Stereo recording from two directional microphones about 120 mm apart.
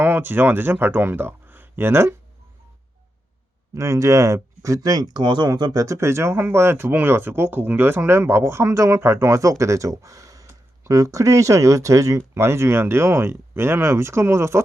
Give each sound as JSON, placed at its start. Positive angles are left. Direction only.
{"t": 0.0, "sound": "speech", "side_deg": -15}
{"t": 3.8, "sound": "speech", "side_deg": -25}